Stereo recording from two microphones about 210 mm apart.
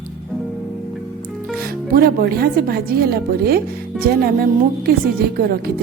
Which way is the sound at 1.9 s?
45° right (ahead or behind).